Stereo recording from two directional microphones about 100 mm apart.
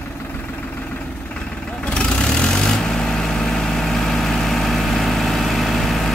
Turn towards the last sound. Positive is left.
turn(degrees=0)  # may be behind; listen again after turning